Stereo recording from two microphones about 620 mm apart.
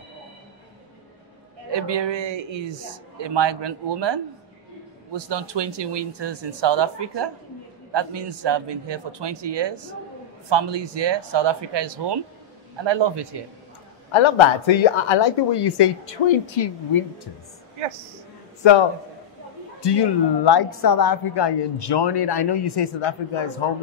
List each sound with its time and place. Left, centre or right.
1.7 s a man's voice: right
14.1 s a woman's voice: left
18.6 s a woman's voice: left